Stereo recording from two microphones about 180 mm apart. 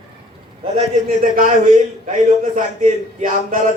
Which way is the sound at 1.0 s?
50° right (ahead or behind).